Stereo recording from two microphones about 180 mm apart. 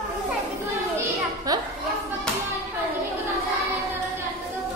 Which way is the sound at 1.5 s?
20° right (ahead or behind).